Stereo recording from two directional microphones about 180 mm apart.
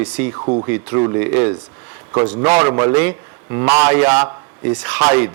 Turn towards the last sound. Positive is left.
turn(degrees=-10)  # may be behind; listen again after turning